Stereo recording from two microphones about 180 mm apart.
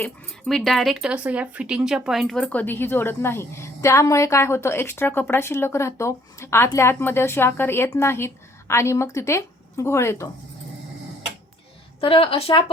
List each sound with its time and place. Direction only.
0.0 s speech: centre (ahead or behind)
11.9 s a woman's voice: 30° left (ahead or behind)